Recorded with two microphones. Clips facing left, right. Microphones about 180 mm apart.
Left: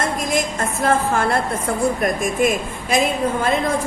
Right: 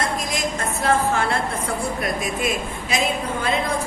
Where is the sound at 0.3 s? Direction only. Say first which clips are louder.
Left 4 dB; 50° left (ahead or behind).